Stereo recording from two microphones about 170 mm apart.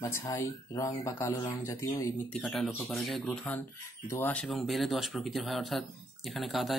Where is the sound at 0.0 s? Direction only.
20° left (ahead or behind).